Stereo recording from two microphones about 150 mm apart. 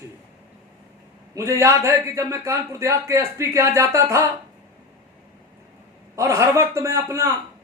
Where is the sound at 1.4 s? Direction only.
20° right (ahead or behind).